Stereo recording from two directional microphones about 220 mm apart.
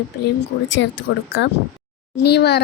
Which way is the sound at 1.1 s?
55° left (ahead or behind).